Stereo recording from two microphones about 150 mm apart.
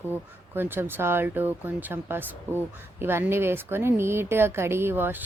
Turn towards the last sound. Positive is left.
turn(degrees=-15)  # may be behind; listen again after turning